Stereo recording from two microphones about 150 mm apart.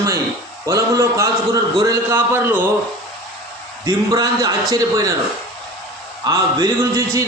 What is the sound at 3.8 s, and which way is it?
A man's voice, 25° right (ahead or behind).